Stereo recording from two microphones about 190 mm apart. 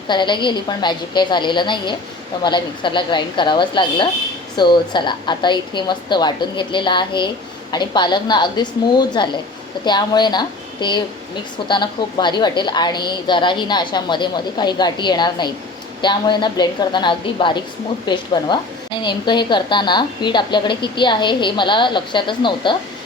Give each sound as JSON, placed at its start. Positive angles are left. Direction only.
{"t": 0.1, "sound": "a woman's voice", "side_deg": 25}